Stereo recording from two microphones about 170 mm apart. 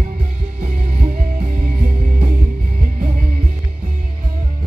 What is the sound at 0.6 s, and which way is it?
Music, 40° right (ahead or behind).